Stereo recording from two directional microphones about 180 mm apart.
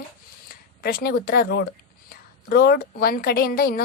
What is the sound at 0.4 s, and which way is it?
A woman's voice, 55° left (ahead or behind).